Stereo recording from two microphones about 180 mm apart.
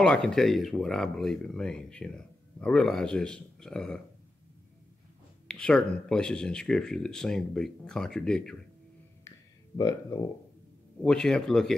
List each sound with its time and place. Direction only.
0.0 s speech: 5° left (ahead or behind)
5.5 s speech: 5° left (ahead or behind)
9.8 s speech: 20° left (ahead or behind)
11.0 s speech: 5° left (ahead or behind)